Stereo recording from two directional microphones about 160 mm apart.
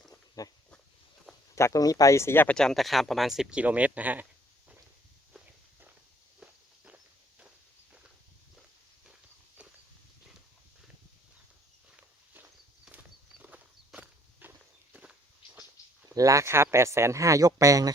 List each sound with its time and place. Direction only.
0.1 s dog: 20° left (ahead or behind)
1.5 s speech: 20° left (ahead or behind); by 4.3 s 10° right (ahead or behind)
11.9 s walk: 10° right (ahead or behind)
16.0 s speech: 20° right (ahead or behind)